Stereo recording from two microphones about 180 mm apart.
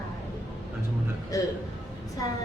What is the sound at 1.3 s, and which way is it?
Speech, 20° left (ahead or behind).